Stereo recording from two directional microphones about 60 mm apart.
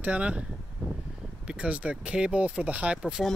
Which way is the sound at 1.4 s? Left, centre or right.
Centre.